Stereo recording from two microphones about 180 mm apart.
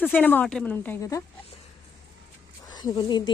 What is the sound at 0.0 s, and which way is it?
A woman's voice, 10° left (ahead or behind).